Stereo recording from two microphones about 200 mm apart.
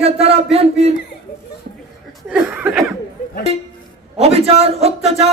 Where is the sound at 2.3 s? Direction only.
5° right (ahead or behind).